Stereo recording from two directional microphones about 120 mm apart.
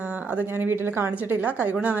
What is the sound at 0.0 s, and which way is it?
Speech, 15° right (ahead or behind).